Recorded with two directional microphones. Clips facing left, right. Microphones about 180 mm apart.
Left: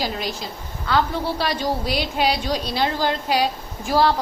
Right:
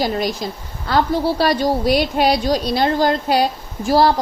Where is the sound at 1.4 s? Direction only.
45° right (ahead or behind).